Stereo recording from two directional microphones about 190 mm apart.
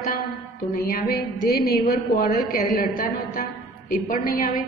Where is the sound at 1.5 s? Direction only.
55° left (ahead or behind).